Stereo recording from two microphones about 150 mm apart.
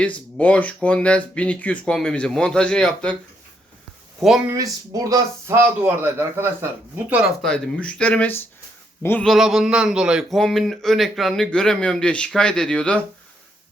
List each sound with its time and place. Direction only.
0.0 s speech: 10° left (ahead or behind)
4.2 s a man's voice: centre (ahead or behind)
4.4 s speech: 25° right (ahead or behind)
7.4 s a man's voice: 5° left (ahead or behind)